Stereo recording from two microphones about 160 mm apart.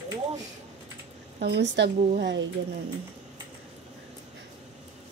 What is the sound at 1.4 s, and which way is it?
Speech, 90° right.